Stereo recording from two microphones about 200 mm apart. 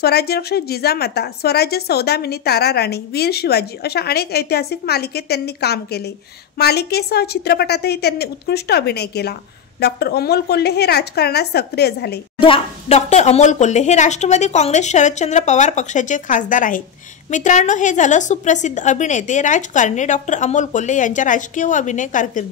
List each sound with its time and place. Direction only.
0.0 s speech: 50° left (ahead or behind)
12.4 s a woman's voice: 25° left (ahead or behind)